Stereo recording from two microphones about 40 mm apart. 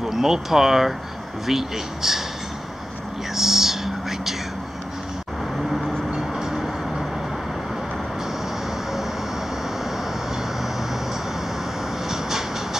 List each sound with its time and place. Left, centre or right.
0.0 s speech: centre
3.3 s whispering: centre
5.6 s vehicle: centre
6.0 s train: centre
12.1 s train: centre